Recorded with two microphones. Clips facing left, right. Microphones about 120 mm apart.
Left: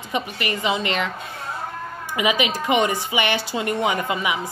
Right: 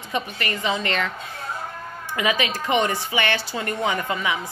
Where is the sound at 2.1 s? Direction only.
15° left (ahead or behind).